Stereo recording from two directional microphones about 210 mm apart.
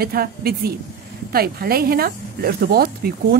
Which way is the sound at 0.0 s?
45° right (ahead or behind).